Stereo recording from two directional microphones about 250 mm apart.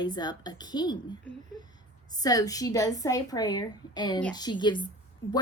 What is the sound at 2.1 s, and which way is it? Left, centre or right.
A woman's voice, centre.